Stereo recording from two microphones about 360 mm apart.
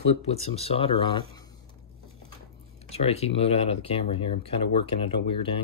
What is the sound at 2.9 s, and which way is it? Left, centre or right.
Speech, centre.